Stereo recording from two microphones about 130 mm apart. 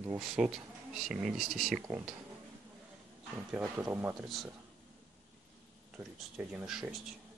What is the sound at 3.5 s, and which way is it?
Speech, 10° right (ahead or behind).